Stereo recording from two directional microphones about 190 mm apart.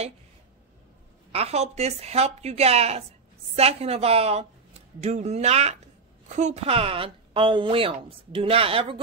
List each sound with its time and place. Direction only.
1.3 s a woman's voice: 35° right (ahead or behind)